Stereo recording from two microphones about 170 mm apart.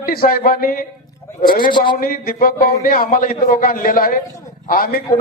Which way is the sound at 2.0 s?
60° left (ahead or behind).